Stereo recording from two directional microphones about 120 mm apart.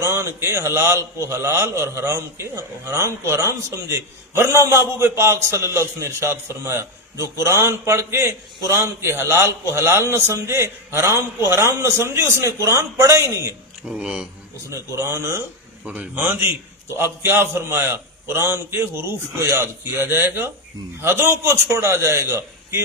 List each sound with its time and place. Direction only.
0.0 s a man's voice: 25° right (ahead or behind)
13.8 s speech: 5° right (ahead or behind)
14.7 s a man's voice: 25° right (ahead or behind)